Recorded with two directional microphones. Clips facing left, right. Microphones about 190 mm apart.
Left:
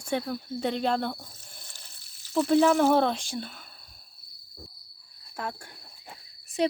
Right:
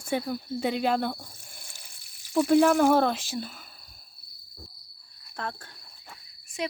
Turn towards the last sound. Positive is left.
turn(degrees=30)  # may be behind; listen again after turning